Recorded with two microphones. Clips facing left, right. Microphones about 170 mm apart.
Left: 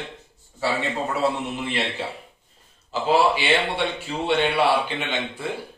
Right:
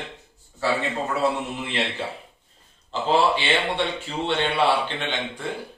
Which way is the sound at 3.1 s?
10° left (ahead or behind).